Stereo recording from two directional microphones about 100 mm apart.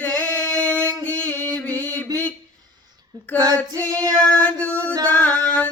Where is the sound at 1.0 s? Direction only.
20° left (ahead or behind).